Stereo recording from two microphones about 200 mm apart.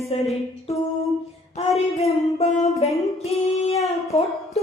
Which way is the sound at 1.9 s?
30° left (ahead or behind).